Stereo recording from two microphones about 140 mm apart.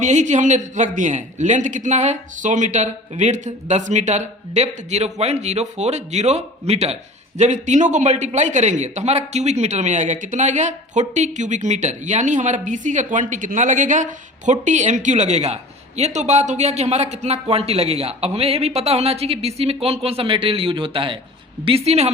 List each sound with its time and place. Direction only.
0.0 s speech: 60° right (ahead or behind)